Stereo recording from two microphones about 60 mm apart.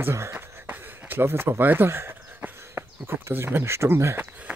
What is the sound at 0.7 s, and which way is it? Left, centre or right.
Speech, right.